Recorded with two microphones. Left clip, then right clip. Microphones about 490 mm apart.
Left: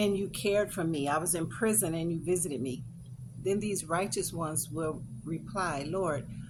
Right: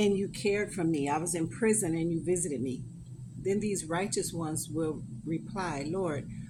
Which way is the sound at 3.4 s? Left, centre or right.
Left.